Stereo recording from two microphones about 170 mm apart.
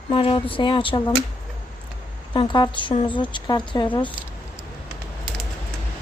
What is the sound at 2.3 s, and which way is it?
Speech, 25° left (ahead or behind).